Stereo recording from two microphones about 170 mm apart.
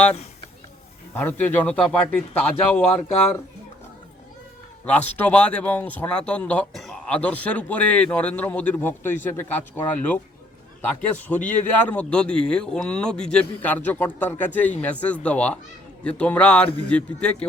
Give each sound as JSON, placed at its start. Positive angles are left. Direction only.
{"t": 1.1, "sound": "a man's voice", "side_deg": 10}
{"t": 4.9, "sound": "a man's voice", "side_deg": 10}